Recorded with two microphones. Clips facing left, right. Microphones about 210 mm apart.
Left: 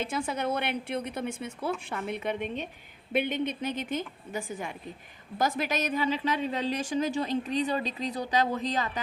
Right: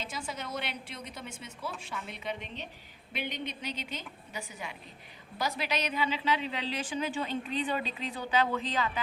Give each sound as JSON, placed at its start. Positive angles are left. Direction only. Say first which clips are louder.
{"t": 0.0, "sound": "a woman's voice", "louder": "left 9 dB", "side_deg": 55}